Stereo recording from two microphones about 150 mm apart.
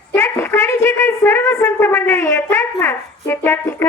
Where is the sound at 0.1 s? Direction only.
15° left (ahead or behind).